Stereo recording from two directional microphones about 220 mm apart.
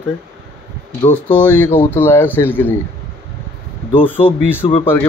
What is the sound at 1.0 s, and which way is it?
Speech, 5° left (ahead or behind).